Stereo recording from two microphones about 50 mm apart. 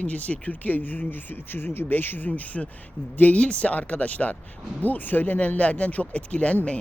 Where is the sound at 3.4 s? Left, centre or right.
Left.